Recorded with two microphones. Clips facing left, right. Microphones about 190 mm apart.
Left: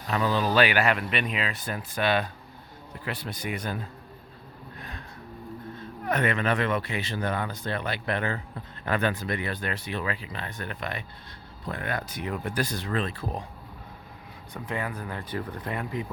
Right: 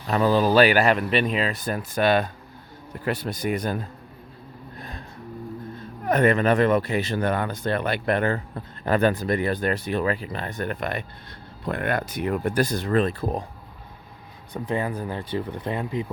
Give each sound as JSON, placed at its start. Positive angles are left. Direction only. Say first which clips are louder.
{"t": 0.1, "sound": "speech", "louder": "right 6 dB", "side_deg": -40}
{"t": 4.8, "sound": "a sound", "louder": "right 4 dB", "side_deg": -35}
{"t": 6.1, "sound": "speech", "louder": "right 7 dB", "side_deg": -40}
{"t": 7.2, "sound": "speech", "louder": "right 5 dB", "side_deg": -55}
{"t": 11.6, "sound": "speech", "louder": "right 6 dB", "side_deg": -60}
{"t": 14.5, "sound": "speech", "louder": "right 6 dB", "side_deg": -30}